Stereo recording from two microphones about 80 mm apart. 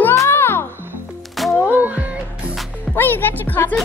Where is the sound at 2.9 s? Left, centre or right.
Left.